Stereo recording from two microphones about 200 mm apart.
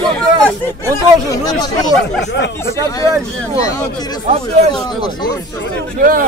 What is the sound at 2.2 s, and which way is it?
Speech, 60° left (ahead or behind).